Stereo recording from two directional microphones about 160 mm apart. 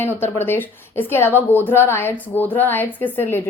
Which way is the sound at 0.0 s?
15° left (ahead or behind).